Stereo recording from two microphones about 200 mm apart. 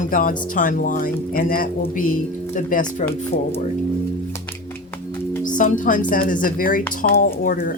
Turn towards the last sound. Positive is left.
turn(degrees=45)  # may be behind; listen again after turning